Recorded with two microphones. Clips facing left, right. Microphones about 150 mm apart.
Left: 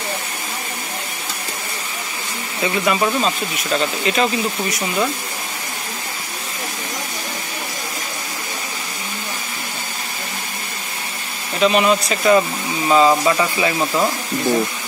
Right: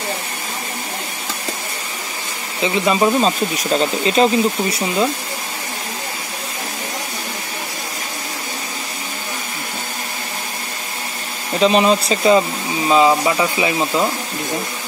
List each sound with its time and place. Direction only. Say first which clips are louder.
2.6 s speech: right 3 dB; 25° right (ahead or behind)
11.6 s speech: right 1 dB; 30° right (ahead or behind)
12.4 s speech: right 1 dB; 15° right (ahead or behind)